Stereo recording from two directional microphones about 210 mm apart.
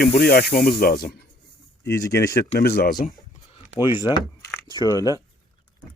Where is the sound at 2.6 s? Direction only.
45° left (ahead or behind).